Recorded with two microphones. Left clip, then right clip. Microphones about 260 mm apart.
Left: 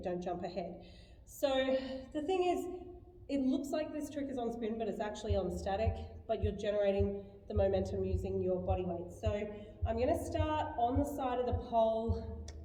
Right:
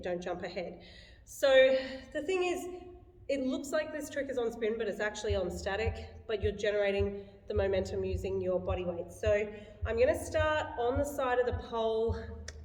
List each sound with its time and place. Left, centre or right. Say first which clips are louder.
0.0 s a woman's voice: right 2 dB; centre
5.3 s speech: right 3 dB; right
5.5 s a woman's voice: right 1 dB; centre